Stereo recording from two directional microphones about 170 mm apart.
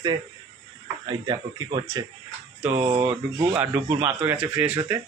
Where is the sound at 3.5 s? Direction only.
10° right (ahead or behind).